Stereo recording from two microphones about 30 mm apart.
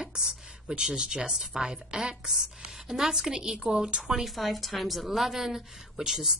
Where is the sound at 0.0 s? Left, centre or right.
Right.